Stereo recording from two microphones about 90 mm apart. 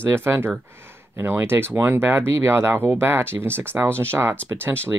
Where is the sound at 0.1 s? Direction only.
30° right (ahead or behind).